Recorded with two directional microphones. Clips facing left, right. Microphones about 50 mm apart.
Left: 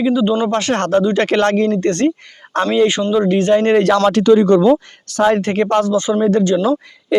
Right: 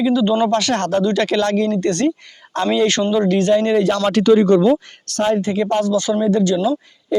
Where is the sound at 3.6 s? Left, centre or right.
Left.